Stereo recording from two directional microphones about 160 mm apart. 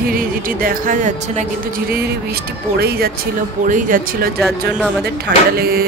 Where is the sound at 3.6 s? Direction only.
55° right (ahead or behind).